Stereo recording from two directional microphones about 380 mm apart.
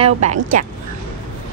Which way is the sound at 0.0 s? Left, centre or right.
Centre.